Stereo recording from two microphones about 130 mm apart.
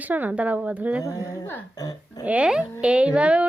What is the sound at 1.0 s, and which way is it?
Speech, 25° left (ahead or behind).